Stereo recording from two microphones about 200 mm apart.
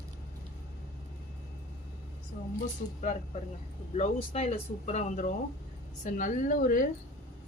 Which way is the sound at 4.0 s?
30° left (ahead or behind).